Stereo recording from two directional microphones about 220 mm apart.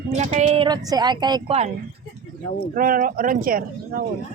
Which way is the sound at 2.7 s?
40° right (ahead or behind).